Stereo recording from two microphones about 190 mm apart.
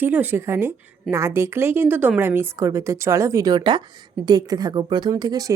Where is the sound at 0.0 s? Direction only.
10° right (ahead or behind).